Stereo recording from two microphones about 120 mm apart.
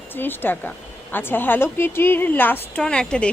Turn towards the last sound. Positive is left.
turn(degrees=5)  # may be behind; listen again after turning